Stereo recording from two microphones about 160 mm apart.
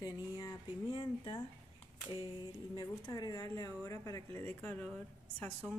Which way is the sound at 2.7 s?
25° left (ahead or behind).